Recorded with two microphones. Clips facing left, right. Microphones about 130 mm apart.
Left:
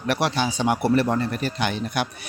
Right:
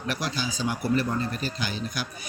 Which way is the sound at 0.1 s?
65° left (ahead or behind).